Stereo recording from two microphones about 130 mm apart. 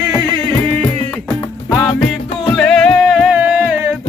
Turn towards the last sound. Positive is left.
turn(degrees=-10)  # may be behind; listen again after turning